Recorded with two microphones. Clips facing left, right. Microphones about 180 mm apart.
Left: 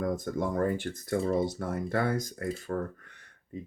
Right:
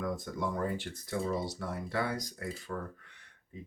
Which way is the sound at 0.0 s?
45° left (ahead or behind).